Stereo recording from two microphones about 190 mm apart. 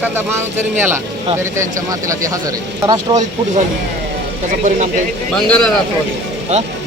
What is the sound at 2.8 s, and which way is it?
Speech, 20° right (ahead or behind).